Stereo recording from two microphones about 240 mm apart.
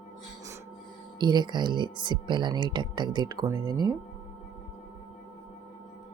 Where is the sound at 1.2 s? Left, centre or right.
Centre.